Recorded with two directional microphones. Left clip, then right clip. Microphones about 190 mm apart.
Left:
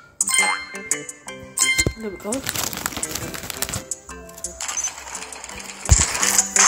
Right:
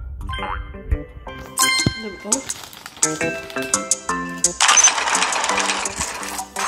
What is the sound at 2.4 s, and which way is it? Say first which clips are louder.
Crumpling: left 7 dB; 65° left (ahead or behind).